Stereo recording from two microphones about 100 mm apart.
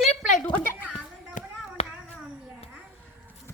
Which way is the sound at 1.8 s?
90° left.